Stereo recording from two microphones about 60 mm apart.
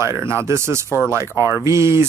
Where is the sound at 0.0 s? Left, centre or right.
Right.